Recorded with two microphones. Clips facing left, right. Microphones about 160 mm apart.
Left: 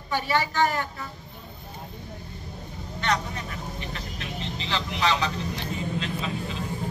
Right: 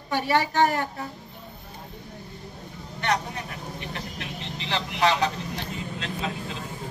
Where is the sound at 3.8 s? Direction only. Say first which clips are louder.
Right 1 dB; 60° right (ahead or behind).